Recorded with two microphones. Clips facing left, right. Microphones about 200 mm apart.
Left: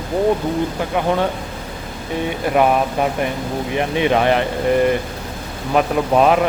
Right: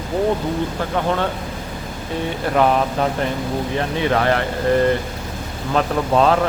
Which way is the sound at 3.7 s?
15° left (ahead or behind).